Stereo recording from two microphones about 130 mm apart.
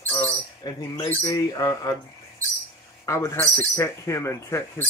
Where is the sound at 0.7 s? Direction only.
30° left (ahead or behind).